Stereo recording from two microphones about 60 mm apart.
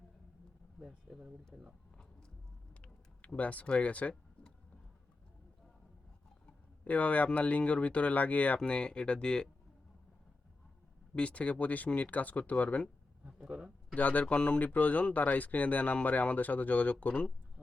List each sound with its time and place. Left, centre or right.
0.8 s speech: centre
3.2 s speech: left
6.4 s a sound: left
7.3 s speech: left
11.1 s speech: centre
13.2 s speech: centre
13.9 s speech: left